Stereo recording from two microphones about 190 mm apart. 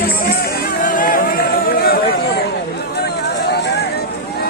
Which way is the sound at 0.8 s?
45° left (ahead or behind).